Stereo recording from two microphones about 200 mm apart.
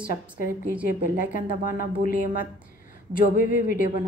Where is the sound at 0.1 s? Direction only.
45° left (ahead or behind).